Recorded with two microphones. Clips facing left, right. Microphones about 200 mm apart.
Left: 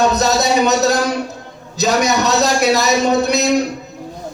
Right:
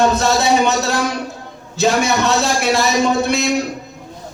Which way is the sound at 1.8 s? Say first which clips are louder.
Even; 40° left (ahead or behind).